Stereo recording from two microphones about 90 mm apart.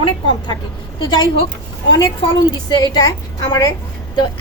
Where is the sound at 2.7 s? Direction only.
55° left (ahead or behind).